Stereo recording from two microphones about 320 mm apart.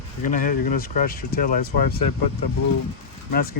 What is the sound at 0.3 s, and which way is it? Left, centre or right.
Speech, left.